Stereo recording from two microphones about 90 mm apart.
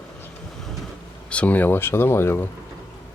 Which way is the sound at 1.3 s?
15° left (ahead or behind).